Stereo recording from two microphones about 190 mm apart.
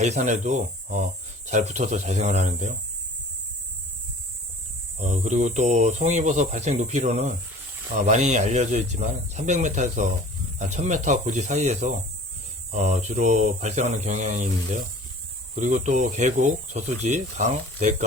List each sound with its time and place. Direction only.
0.0 s speech: 35° right (ahead or behind)
4.9 s speech: 40° right (ahead or behind)